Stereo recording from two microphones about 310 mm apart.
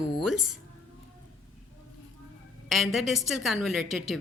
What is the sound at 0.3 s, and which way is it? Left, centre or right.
Speech, right.